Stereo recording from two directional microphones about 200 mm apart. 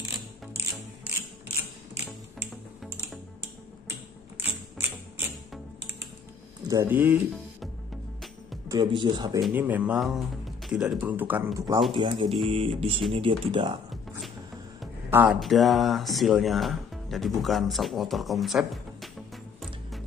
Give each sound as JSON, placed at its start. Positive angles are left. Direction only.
{"t": 4.4, "sound": "music", "side_deg": -10}
{"t": 6.7, "sound": "speech", "side_deg": -10}
{"t": 8.6, "sound": "speech", "side_deg": -20}
{"t": 9.5, "sound": "speech", "side_deg": -10}
{"t": 15.0, "sound": "speech", "side_deg": -10}
{"t": 15.4, "sound": "speech", "side_deg": 0}
{"t": 17.4, "sound": "music", "side_deg": 0}